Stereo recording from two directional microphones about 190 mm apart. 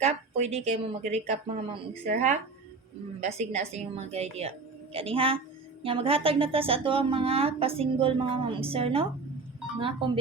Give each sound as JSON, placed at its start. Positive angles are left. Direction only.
{"t": 0.0, "sound": "speech", "side_deg": -35}